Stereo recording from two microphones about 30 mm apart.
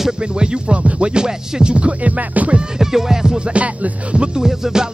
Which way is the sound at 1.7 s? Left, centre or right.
Right.